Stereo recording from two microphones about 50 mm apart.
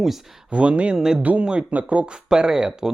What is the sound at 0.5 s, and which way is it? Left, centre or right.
Speech, right.